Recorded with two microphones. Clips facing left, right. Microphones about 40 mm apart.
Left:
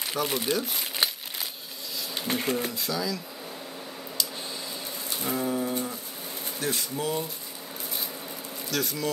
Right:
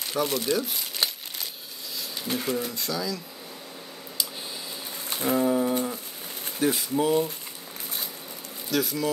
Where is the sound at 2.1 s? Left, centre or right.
Left.